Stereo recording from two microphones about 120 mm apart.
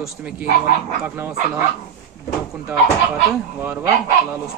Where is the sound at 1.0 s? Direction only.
20° right (ahead or behind).